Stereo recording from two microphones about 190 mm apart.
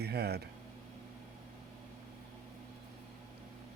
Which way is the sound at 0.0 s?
55° right (ahead or behind).